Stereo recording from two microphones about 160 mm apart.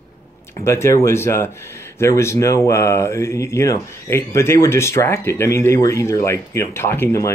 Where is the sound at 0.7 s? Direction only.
15° left (ahead or behind).